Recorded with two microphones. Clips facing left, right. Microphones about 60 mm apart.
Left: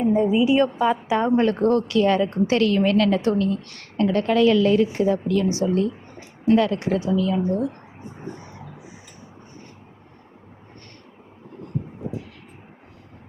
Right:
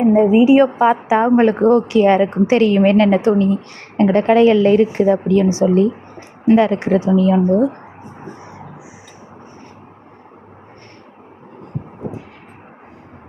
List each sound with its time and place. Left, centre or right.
0.2 s a woman's voice: right
0.4 s a woman's voice: right
0.7 s a woman's voice: right
1.0 s a woman's voice: right
6.4 s a woman's voice: right
12.0 s heart murmur: right